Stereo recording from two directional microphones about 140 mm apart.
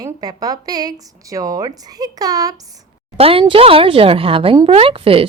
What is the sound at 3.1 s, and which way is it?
A woman's voice, 45° right (ahead or behind).